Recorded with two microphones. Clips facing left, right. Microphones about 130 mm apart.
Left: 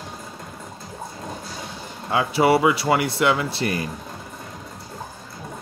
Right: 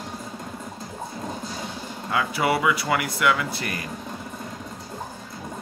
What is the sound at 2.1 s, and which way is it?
Speech, 30° left (ahead or behind).